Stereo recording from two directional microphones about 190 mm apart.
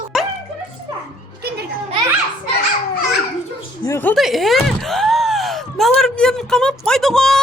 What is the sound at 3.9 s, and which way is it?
Speech, 15° left (ahead or behind).